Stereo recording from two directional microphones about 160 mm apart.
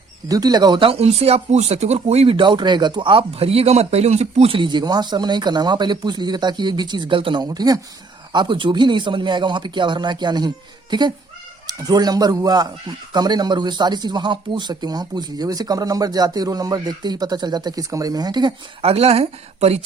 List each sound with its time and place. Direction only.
0.3 s speech: 25° right (ahead or behind); by 19.8 s 40° right (ahead or behind)